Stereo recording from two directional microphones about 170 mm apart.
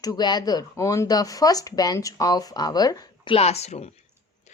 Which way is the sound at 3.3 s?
40° left (ahead or behind).